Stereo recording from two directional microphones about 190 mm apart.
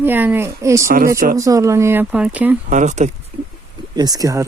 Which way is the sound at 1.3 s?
15° right (ahead or behind).